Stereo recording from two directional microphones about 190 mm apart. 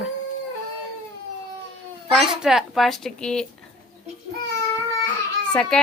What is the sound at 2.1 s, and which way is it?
A child's voice, centre (ahead or behind).